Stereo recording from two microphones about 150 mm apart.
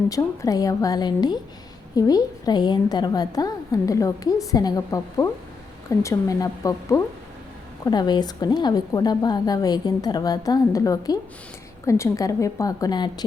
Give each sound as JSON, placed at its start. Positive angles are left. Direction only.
{"t": 0.1, "sound": "a woman's voice", "side_deg": 25}